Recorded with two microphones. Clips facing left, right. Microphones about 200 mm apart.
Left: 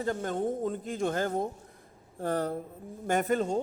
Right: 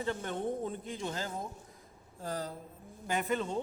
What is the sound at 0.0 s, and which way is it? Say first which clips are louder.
A woman's voice: left 5 dB; 40° left (ahead or behind).